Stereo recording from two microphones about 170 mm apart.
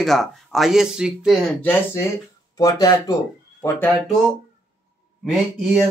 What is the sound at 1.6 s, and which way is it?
Speech, 10° left (ahead or behind).